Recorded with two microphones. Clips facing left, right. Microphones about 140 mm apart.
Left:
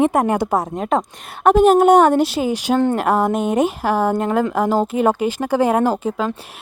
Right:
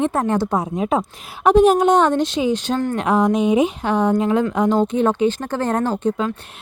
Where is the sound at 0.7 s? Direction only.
5° right (ahead or behind).